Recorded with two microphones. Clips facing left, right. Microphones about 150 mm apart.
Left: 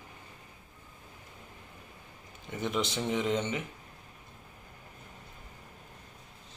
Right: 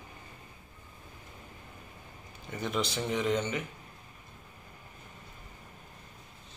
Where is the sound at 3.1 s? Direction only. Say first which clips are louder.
Right 1 dB; 25° left (ahead or behind).